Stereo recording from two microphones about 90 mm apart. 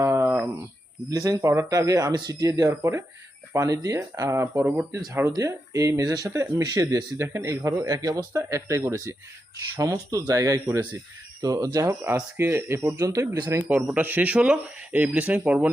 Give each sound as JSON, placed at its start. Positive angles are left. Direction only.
{"t": 0.0, "sound": "a sound", "side_deg": -30}
{"t": 1.1, "sound": "a man's voice", "side_deg": -40}
{"t": 2.4, "sound": "a man's voice", "side_deg": -40}
{"t": 6.3, "sound": "speech", "side_deg": -30}
{"t": 6.7, "sound": "speech", "side_deg": -45}
{"t": 7.2, "sound": "a man's voice", "side_deg": -30}
{"t": 9.7, "sound": "a man's voice", "side_deg": -40}
{"t": 13.6, "sound": "speech", "side_deg": -20}